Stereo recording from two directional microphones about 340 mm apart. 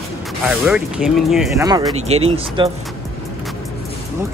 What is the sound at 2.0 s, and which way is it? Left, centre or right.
Speech, centre.